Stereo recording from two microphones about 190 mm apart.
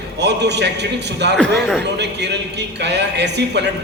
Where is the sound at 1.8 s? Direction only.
65° right (ahead or behind).